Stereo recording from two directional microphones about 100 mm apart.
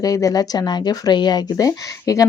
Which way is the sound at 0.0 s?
35° left (ahead or behind).